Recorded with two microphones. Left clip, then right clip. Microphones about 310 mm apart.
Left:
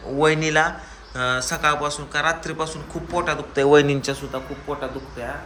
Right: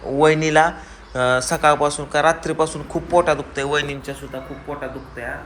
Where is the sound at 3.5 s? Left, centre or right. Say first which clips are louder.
Left 6 dB; centre.